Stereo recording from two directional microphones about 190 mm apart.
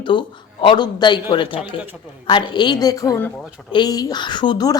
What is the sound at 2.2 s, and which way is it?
A woman's voice, 25° left (ahead or behind).